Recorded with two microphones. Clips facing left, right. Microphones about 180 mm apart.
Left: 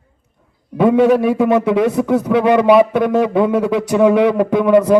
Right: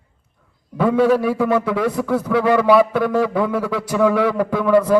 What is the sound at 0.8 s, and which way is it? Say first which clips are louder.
A man's voice: left 4 dB; 20° left (ahead or behind).